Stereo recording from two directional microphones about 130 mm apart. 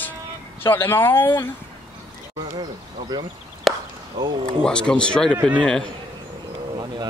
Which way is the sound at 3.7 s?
Centre (ahead or behind).